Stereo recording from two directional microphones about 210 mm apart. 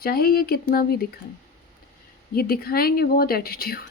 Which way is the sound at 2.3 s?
45° left (ahead or behind).